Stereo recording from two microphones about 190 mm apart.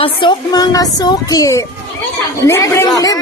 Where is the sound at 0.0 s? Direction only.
25° left (ahead or behind).